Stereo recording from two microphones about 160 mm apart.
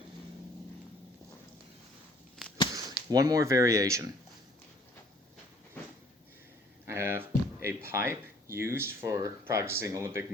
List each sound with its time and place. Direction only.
2.4 s whip: centre (ahead or behind)
2.7 s speech: 20° right (ahead or behind)
6.8 s speech: 15° right (ahead or behind)